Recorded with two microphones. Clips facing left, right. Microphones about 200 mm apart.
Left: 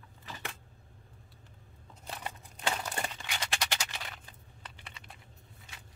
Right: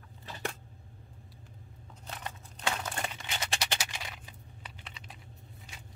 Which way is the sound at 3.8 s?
15° right (ahead or behind).